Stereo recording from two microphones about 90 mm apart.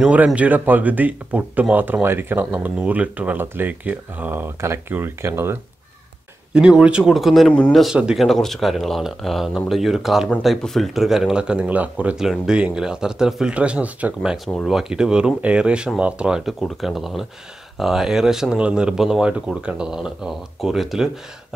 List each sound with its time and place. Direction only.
0.0 s speech: 15° right (ahead or behind)
6.5 s speech: 10° right (ahead or behind)
7.2 s speech: centre (ahead or behind)